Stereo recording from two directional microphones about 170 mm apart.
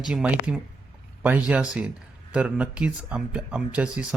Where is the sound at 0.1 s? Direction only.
5° right (ahead or behind).